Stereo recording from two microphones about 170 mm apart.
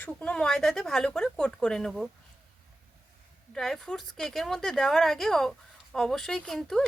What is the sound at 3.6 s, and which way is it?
Speech, centre (ahead or behind).